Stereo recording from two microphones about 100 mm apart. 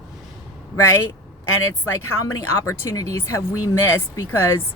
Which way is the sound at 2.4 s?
30° left (ahead or behind).